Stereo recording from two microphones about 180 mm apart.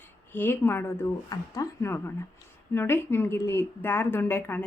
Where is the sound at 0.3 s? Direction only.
10° left (ahead or behind).